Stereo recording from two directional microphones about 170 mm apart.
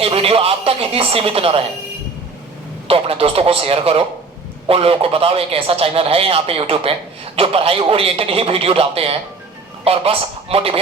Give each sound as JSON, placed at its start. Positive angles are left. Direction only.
{"t": 0.0, "sound": "a man's voice", "side_deg": -35}
{"t": 2.8, "sound": "a man's voice", "side_deg": -35}